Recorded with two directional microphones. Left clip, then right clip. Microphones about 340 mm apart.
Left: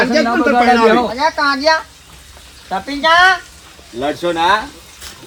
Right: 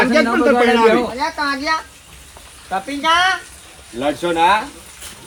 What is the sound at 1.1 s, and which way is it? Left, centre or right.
Speech, left.